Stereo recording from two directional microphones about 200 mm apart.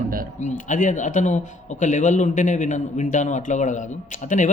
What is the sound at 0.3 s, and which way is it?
A man's voice, 35° left (ahead or behind).